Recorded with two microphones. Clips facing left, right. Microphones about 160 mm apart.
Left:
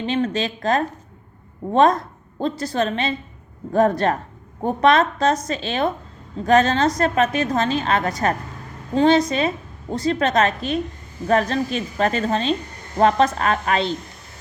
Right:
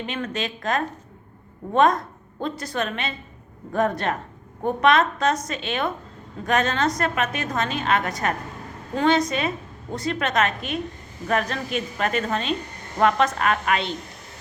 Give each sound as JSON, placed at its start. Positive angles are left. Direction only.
{"t": 0.0, "sound": "a woman's voice", "side_deg": 30}